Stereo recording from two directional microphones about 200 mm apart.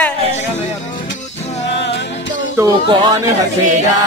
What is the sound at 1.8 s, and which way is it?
Music, 65° left (ahead or behind).